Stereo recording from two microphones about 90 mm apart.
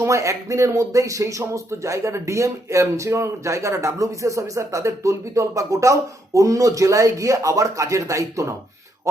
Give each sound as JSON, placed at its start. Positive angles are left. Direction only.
{"t": 0.0, "sound": "speech", "side_deg": -35}